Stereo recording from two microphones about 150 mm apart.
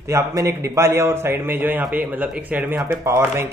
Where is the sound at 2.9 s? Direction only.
20° right (ahead or behind).